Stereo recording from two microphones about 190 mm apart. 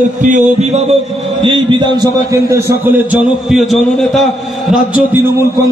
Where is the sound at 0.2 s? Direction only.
40° right (ahead or behind).